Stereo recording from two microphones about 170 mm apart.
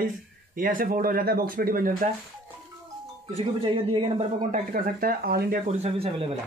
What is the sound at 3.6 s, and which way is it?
Speech, 35° right (ahead or behind).